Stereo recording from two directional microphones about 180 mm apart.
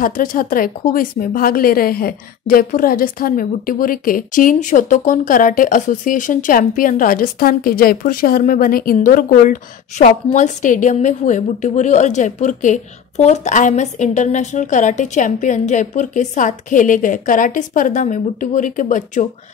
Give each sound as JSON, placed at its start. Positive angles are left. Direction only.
{"t": 0.0, "sound": "speech", "side_deg": 50}